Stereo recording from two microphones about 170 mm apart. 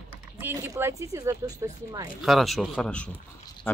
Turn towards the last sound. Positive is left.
turn(degrees=15)  # may be behind; listen again after turning